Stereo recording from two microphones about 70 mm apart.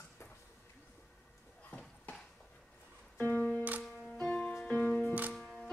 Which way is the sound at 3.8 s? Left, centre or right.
Centre.